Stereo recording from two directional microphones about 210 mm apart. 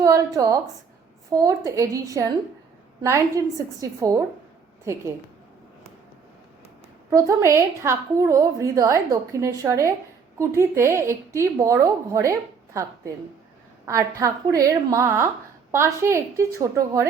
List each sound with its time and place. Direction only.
0.0 s a woman's voice: 15° right (ahead or behind)
7.1 s a woman's voice: 15° right (ahead or behind)
13.8 s a woman's voice: 15° right (ahead or behind)